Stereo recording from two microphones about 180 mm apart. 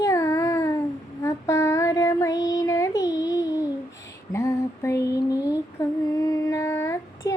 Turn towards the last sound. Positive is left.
turn(degrees=15)  # may be behind; listen again after turning